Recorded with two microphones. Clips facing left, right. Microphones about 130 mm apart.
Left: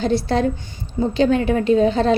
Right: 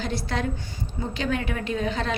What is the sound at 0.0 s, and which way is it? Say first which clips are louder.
A woman's voice: left 10 dB; 30° left (ahead or behind).